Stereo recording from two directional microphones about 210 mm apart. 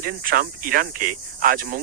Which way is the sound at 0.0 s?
40° right (ahead or behind).